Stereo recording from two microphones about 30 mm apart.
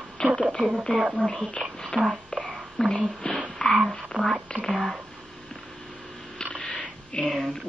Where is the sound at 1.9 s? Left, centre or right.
Left.